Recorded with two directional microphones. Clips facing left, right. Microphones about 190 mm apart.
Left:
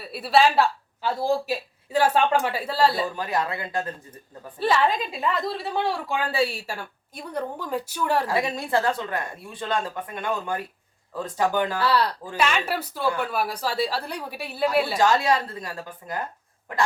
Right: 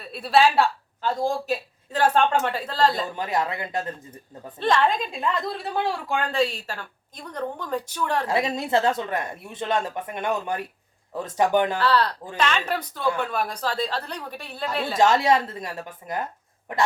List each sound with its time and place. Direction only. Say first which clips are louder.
0.0 s a woman's voice: even; 5° left (ahead or behind)
3.2 s speech: right 1 dB; 20° right (ahead or behind)
4.6 s a woman's voice: even; 5° left (ahead or behind)
8.3 s speech: right 1 dB; 20° right (ahead or behind)
11.8 s a woman's voice: right 1 dB; 10° left (ahead or behind)
14.9 s speech: right 2 dB; 20° right (ahead or behind)